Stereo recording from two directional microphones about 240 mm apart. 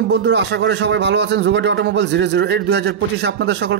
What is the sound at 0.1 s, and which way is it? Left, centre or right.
Speech, right.